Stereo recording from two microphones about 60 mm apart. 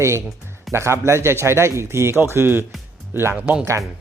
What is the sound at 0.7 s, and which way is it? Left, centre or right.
Speech, right.